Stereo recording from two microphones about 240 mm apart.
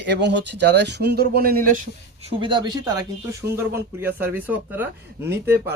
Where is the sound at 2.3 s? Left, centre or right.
Centre.